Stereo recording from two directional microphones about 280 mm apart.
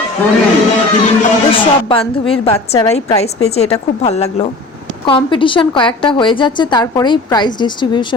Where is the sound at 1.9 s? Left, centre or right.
Centre.